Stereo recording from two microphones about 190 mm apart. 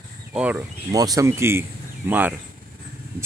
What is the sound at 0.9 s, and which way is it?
Speech, 20° right (ahead or behind).